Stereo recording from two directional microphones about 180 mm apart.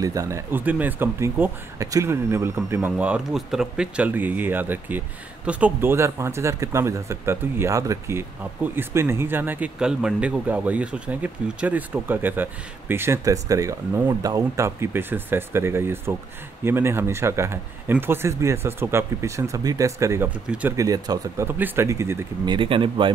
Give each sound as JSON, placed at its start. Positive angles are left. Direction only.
{"t": 0.0, "sound": "speech", "side_deg": -20}
{"t": 20.7, "sound": "speech", "side_deg": -20}
{"t": 22.5, "sound": "speech", "side_deg": -30}